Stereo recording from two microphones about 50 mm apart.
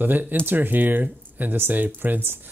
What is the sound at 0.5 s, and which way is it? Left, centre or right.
Speech, right.